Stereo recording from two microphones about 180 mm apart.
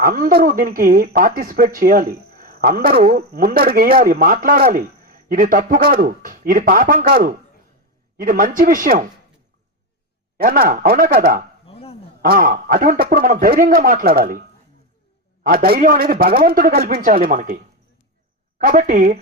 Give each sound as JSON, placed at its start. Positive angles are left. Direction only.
{"t": 0.0, "sound": "speech", "side_deg": -50}
{"t": 10.3, "sound": "speech", "side_deg": -55}
{"t": 11.6, "sound": "a sound", "side_deg": 35}
{"t": 12.2, "sound": "speech", "side_deg": -50}
{"t": 15.4, "sound": "a man's voice", "side_deg": -55}
{"t": 18.6, "sound": "speech", "side_deg": -45}